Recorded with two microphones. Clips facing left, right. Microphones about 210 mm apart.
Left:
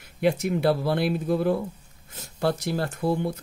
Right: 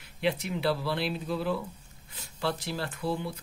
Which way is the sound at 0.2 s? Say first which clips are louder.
Left 6 dB; 45° left (ahead or behind).